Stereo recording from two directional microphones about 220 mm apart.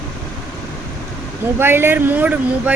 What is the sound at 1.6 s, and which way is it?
Speech, 10° right (ahead or behind).